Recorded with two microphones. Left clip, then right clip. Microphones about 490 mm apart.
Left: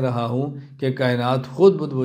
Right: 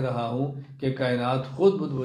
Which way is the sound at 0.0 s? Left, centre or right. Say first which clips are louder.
Left 4 dB; left.